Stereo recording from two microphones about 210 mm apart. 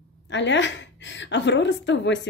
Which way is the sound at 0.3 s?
60° left (ahead or behind).